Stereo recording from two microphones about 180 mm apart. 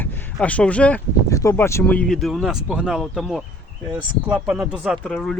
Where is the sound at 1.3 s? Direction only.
15° left (ahead or behind).